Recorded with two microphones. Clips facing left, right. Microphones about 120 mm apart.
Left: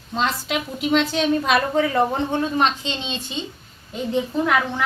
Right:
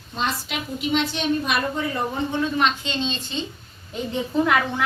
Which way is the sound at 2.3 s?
40° left (ahead or behind).